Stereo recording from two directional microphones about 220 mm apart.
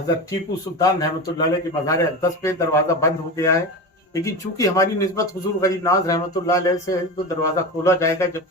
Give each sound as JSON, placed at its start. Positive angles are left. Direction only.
{"t": 0.8, "sound": "a man's voice", "side_deg": 15}